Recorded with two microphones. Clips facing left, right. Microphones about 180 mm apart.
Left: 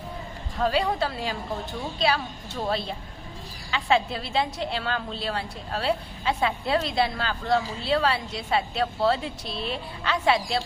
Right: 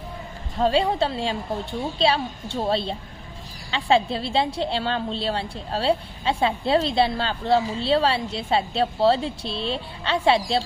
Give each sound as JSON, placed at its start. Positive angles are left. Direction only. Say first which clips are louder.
{"t": 0.5, "sound": "a woman's voice", "louder": "right 4 dB", "side_deg": -25}